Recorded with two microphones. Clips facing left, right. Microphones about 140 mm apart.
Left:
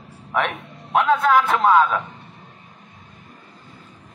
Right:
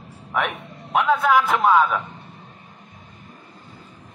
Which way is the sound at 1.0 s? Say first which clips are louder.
Left 1 dB; 5° right (ahead or behind).